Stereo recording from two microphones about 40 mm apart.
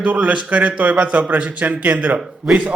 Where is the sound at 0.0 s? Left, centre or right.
Right.